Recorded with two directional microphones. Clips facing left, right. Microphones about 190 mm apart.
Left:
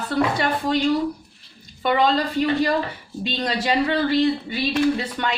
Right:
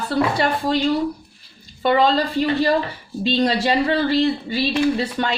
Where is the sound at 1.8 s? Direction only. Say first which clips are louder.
Right 2 dB; 30° right (ahead or behind).